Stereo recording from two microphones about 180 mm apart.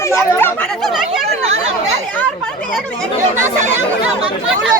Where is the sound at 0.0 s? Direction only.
15° left (ahead or behind).